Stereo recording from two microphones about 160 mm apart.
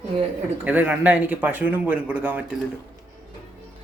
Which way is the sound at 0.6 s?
10° right (ahead or behind).